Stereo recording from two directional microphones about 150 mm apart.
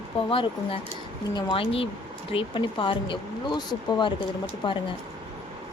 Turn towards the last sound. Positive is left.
turn(degrees=30)  # may be behind; listen again after turning